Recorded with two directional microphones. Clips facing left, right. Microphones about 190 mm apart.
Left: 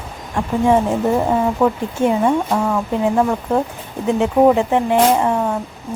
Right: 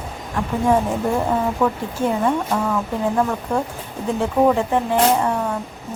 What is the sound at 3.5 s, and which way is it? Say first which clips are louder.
Speech: left 4 dB; 25° left (ahead or behind).